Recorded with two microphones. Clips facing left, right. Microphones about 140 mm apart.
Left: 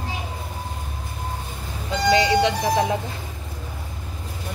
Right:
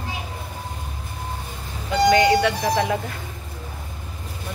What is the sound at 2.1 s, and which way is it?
Speech, 20° left (ahead or behind).